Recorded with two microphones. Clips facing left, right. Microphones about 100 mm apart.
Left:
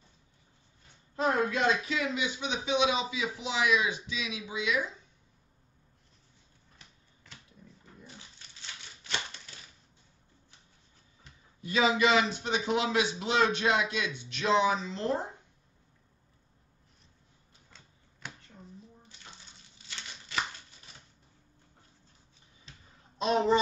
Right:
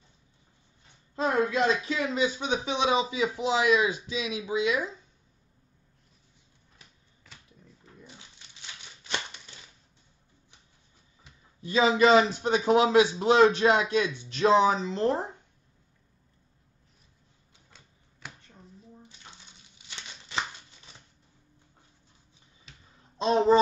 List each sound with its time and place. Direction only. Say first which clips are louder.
1.1 s speech: right 2 dB; 30° right (ahead or behind)
8.4 s crumpling: right 1 dB; 20° right (ahead or behind)
11.6 s speech: right 4 dB; 30° right (ahead or behind)
18.2 s finger snapping: even; 5° right (ahead or behind)
20.0 s a sound: right 1 dB; 25° right (ahead or behind)
23.1 s speech: right 4 dB; 30° right (ahead or behind)